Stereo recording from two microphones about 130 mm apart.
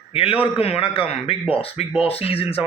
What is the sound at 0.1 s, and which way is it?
A man's voice, 45° left (ahead or behind).